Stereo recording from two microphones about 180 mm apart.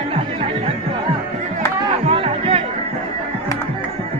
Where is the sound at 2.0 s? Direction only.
30° right (ahead or behind).